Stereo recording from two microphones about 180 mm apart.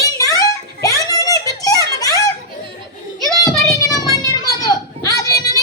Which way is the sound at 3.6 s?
20° left (ahead or behind).